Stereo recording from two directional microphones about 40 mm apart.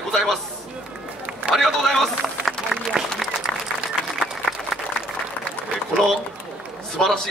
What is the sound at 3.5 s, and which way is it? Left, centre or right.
Applause, centre.